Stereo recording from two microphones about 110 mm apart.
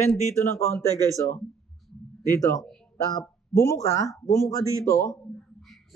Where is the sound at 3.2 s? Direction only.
30° left (ahead or behind).